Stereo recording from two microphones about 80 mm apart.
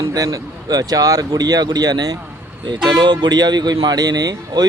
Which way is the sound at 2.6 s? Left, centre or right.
Right.